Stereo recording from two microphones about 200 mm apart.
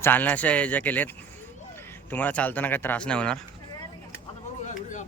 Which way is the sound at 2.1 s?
10° left (ahead or behind).